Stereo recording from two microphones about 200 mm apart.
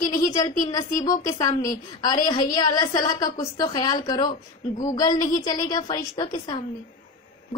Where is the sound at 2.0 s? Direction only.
20° left (ahead or behind).